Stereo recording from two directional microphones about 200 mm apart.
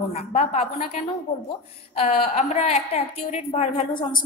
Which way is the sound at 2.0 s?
30° left (ahead or behind).